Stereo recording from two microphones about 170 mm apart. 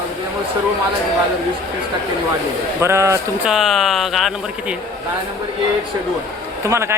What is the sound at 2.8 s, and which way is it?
Speech, 15° right (ahead or behind).